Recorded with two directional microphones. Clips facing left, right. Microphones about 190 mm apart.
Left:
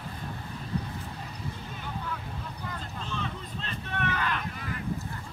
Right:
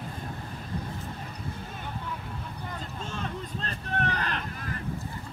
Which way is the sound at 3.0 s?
45° right (ahead or behind).